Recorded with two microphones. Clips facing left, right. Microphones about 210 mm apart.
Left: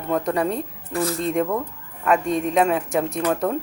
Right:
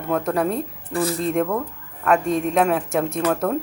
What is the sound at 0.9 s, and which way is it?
Speech, 30° right (ahead or behind).